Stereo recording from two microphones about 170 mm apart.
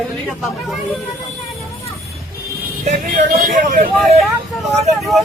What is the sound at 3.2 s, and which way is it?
Speech, 60° right (ahead or behind).